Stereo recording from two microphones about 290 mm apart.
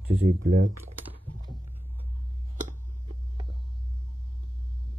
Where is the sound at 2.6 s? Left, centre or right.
Right.